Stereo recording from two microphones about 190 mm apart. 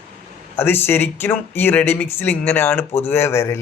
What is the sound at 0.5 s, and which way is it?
Speech, 10° left (ahead or behind).